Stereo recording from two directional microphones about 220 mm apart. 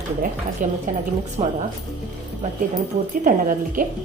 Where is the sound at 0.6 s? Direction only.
35° right (ahead or behind).